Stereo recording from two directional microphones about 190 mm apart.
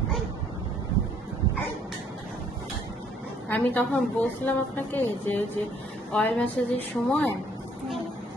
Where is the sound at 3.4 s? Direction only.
10° left (ahead or behind).